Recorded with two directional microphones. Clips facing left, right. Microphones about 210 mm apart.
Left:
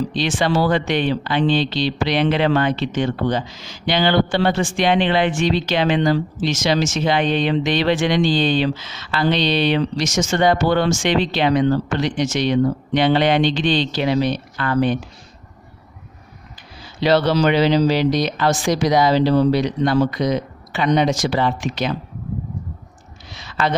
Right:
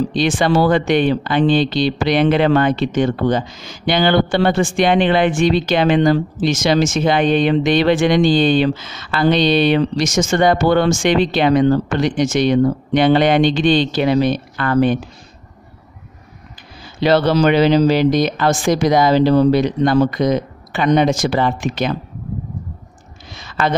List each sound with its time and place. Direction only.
0.1 s speech: 50° right (ahead or behind)
17.0 s speech: 50° right (ahead or behind)
23.3 s a sound: 50° right (ahead or behind)